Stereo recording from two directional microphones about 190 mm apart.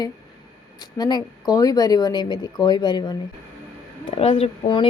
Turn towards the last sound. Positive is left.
turn(degrees=25)  # may be behind; listen again after turning